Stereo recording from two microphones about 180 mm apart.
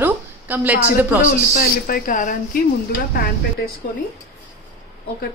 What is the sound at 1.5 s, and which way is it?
Speech, 50° left (ahead or behind).